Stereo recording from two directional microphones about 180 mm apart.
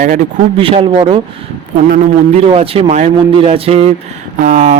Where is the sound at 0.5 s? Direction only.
30° right (ahead or behind).